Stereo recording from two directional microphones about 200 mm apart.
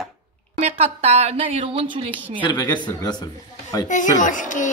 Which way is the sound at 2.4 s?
20° left (ahead or behind).